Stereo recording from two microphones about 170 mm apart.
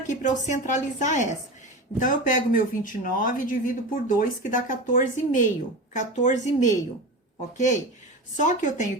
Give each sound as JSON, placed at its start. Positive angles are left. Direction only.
{"t": 0.1, "sound": "speech", "side_deg": 45}